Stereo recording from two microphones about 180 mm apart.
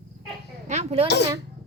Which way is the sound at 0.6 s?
35° right (ahead or behind).